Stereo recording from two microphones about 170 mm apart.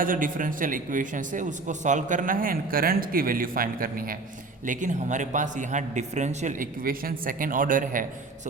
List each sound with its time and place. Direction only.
0.0 s speech: 55° right (ahead or behind)